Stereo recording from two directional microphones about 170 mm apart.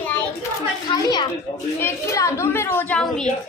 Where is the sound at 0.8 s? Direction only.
25° left (ahead or behind); by 3.3 s 5° left (ahead or behind).